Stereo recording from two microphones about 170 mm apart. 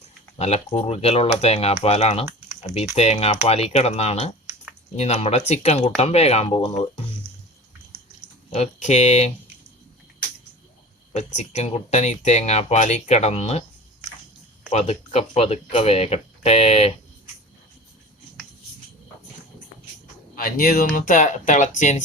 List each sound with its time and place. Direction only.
0.3 s speech: 40° left (ahead or behind)
8.5 s speech: 40° left (ahead or behind)
11.1 s speech: 40° left (ahead or behind)
14.7 s speech: 40° left (ahead or behind)
20.3 s speech: 55° left (ahead or behind)